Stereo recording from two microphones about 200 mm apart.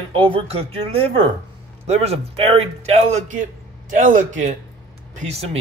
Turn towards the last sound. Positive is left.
turn(degrees=-30)  # may be behind; listen again after turning